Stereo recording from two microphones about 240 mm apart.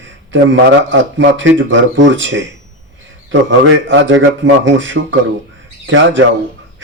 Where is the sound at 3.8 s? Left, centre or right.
Right.